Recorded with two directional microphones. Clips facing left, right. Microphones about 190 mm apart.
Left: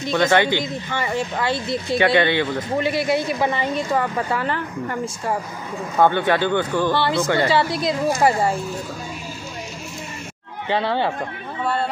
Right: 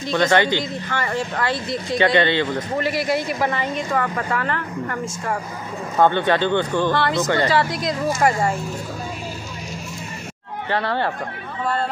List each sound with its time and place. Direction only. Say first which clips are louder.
0.1 s a woman's voice: even; 10° left (ahead or behind)
1.9 s speech: even; 5° left (ahead or behind)
2.8 s a woman's voice: left 2 dB; 25° left (ahead or behind)
5.9 s speech: even; 10° left (ahead or behind)
10.7 s a woman's voice: left 2 dB; 20° left (ahead or behind)
11.6 s speech: even; centre (ahead or behind)